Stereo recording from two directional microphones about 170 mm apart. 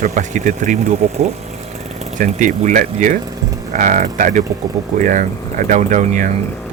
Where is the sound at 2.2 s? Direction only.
45° right (ahead or behind).